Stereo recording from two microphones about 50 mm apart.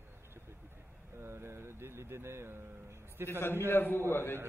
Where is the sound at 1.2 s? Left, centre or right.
Right.